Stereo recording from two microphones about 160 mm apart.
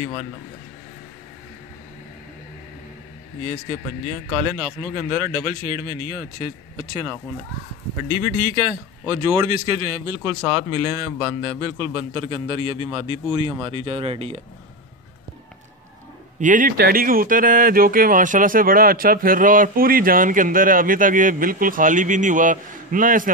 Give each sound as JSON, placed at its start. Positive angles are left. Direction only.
{"t": 4.9, "sound": "speech", "side_deg": -30}
{"t": 8.2, "sound": "a man's voice", "side_deg": -30}
{"t": 16.3, "sound": "speech", "side_deg": -55}